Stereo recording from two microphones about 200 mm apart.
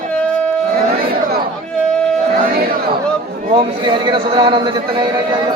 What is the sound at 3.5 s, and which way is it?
A man's voice, 25° right (ahead or behind).